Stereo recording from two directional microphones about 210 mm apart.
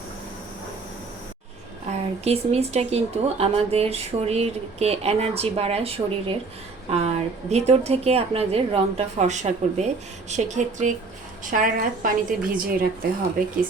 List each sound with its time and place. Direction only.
1.9 s speech: 30° right (ahead or behind)
7.5 s a woman's voice: 30° right (ahead or behind)